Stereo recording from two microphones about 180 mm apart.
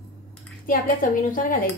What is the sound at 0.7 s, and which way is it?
Speech, 50° left (ahead or behind).